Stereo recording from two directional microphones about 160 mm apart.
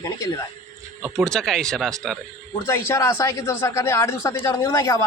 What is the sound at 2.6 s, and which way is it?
A man's voice, 15° left (ahead or behind).